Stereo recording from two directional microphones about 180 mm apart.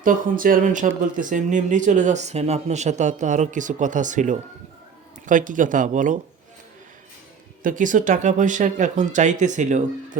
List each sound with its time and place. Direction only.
0.0 s speech: 50° right (ahead or behind)
7.6 s speech: 45° right (ahead or behind)